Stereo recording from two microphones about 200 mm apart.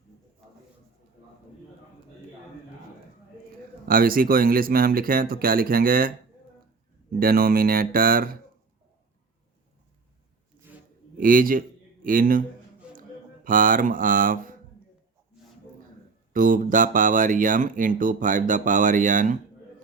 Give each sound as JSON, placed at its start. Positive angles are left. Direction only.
{"t": 3.8, "sound": "speech", "side_deg": -45}
{"t": 7.2, "sound": "speech", "side_deg": -45}
{"t": 11.2, "sound": "speech", "side_deg": -45}
{"t": 16.3, "sound": "speech", "side_deg": -40}